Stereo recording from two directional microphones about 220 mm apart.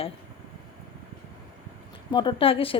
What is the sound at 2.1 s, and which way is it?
Speech, 20° left (ahead or behind).